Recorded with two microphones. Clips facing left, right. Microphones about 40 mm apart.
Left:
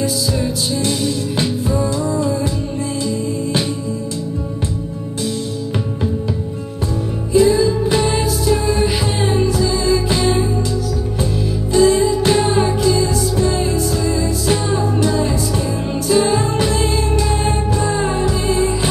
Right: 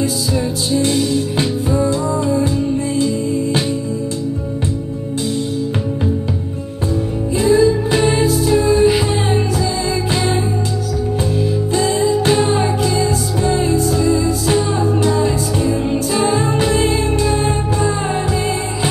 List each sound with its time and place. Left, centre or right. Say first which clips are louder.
0.7 s music: right 3 dB; right
7.3 s music: even; right
16.3 s music: right 1 dB; right